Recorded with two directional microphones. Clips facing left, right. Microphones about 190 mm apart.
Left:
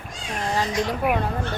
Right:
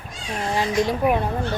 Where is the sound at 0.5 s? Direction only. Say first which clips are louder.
Right 3 dB; 15° right (ahead or behind).